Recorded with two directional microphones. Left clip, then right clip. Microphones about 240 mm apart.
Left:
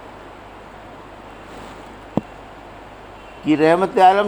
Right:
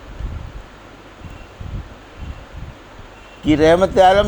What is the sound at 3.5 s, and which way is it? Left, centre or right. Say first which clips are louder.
Speech: right 2 dB; right.